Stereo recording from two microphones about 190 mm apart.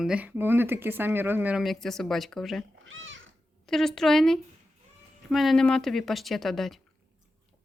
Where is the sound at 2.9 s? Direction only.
90° right.